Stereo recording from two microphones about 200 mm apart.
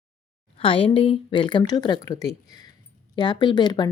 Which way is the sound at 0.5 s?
25° left (ahead or behind).